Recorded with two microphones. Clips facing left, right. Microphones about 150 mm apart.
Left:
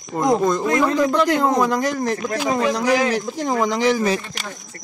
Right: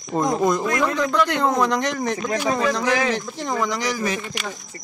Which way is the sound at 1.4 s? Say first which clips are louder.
Left 2 dB; 5° left (ahead or behind).